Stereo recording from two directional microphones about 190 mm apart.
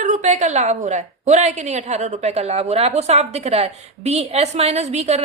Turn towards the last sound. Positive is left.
turn(degrees=-35)  # may be behind; listen again after turning